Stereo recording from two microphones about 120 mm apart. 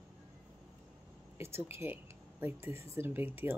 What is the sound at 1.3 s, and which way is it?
Speech, 20° right (ahead or behind).